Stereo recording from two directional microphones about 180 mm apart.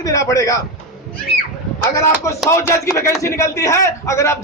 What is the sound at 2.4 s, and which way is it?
A man's voice, 15° left (ahead or behind).